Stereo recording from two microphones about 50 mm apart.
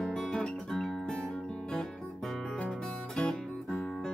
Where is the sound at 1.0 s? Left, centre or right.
Centre.